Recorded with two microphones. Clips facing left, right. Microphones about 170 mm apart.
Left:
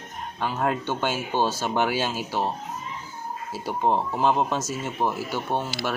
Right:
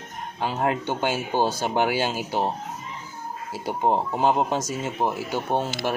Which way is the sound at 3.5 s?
15° right (ahead or behind).